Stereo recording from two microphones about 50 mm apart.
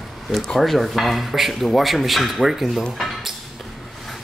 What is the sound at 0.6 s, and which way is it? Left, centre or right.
Speech, centre.